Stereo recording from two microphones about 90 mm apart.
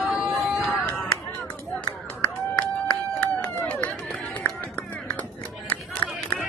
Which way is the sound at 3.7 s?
10° left (ahead or behind).